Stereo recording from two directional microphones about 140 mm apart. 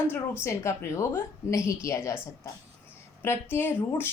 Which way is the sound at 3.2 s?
15° left (ahead or behind).